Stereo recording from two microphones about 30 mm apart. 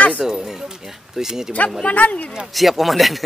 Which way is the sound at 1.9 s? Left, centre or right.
Left.